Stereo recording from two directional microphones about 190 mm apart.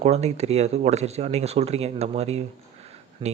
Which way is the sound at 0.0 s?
35° right (ahead or behind).